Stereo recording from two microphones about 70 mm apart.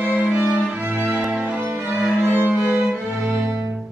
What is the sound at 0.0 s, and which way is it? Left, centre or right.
Music, centre.